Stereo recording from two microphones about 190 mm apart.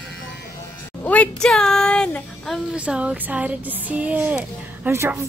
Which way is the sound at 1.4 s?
5° left (ahead or behind).